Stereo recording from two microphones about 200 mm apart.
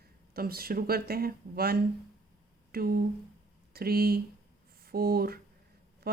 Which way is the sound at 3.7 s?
50° right (ahead or behind).